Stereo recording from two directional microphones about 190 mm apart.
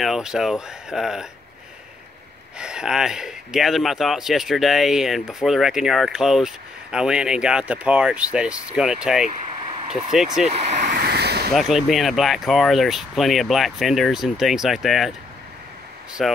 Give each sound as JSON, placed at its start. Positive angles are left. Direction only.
{"t": 0.0, "sound": "speech", "side_deg": 0}
{"t": 2.6, "sound": "speech", "side_deg": -5}
{"t": 10.7, "sound": "vehicle", "side_deg": -45}
{"t": 11.5, "sound": "speech", "side_deg": 0}
{"t": 16.2, "sound": "speech", "side_deg": 0}